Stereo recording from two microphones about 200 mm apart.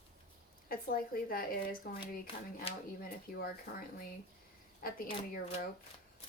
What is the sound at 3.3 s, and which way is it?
Speech, 45° left (ahead or behind).